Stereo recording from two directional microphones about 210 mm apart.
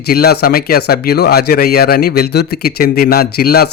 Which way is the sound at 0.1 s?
45° left (ahead or behind).